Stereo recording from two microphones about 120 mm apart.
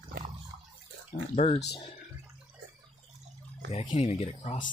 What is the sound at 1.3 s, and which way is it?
Speech, 60° left (ahead or behind).